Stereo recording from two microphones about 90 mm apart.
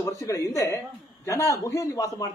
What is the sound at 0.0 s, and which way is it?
A man's voice, 35° left (ahead or behind).